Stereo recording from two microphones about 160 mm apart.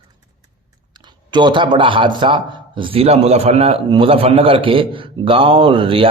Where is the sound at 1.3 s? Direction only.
30° right (ahead or behind).